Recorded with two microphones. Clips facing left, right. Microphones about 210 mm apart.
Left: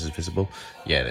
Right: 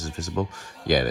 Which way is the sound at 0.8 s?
50° right (ahead or behind).